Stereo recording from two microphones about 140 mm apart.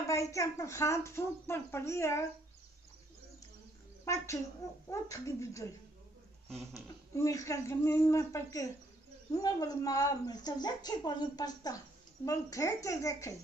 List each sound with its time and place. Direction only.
0.0 s speech: 20° left (ahead or behind)
4.0 s a woman's voice: 20° left (ahead or behind)
7.2 s speech: 20° left (ahead or behind)